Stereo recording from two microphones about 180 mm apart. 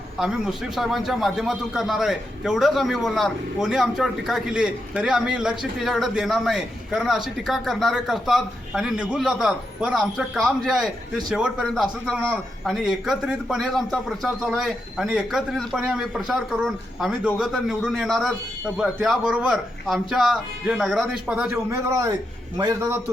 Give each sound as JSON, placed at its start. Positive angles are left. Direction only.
{"t": 0.2, "sound": "a man's voice", "side_deg": -5}
{"t": 21.7, "sound": "a man's voice", "side_deg": -20}